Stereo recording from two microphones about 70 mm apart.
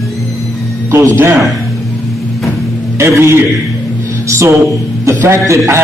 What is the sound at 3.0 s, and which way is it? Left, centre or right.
A man's voice, right.